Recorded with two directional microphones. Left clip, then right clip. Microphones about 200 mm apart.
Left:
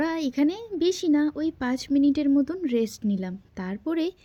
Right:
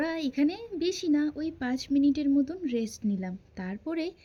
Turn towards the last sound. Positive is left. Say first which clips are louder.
# left 5 dB
turn(degrees=30)  # may be behind; listen again after turning